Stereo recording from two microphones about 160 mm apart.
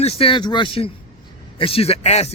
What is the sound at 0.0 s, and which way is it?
A man's voice, 40° left (ahead or behind).